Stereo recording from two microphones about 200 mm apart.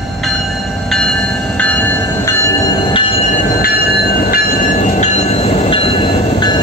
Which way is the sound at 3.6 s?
50° left (ahead or behind).